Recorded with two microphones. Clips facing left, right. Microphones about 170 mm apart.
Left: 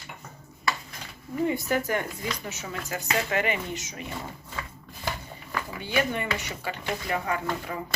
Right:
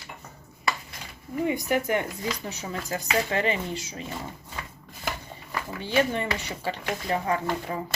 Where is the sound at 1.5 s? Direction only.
15° right (ahead or behind).